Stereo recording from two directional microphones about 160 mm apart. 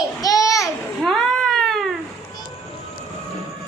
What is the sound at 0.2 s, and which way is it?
Babbling, 20° left (ahead or behind).